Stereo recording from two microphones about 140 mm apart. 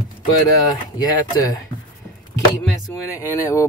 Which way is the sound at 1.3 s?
30° left (ahead or behind).